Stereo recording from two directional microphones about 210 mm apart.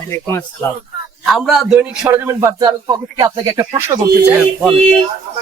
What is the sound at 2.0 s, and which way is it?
Speech, 10° right (ahead or behind).